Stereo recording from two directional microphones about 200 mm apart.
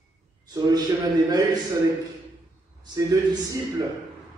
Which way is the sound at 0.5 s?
20° right (ahead or behind).